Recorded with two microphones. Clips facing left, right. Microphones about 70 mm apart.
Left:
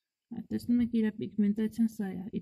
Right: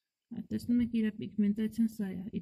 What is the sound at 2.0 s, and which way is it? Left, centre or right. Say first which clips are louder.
Speech: left 1 dB; left.